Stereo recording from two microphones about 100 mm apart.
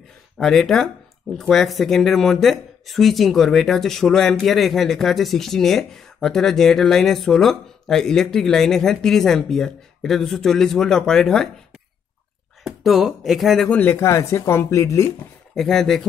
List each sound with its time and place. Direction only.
0.4 s speech: centre (ahead or behind)
12.6 s speech: centre (ahead or behind)
13.7 s speech: 15° left (ahead or behind)
14.0 s speech: 30° left (ahead or behind)
15.5 s speech: 5° left (ahead or behind)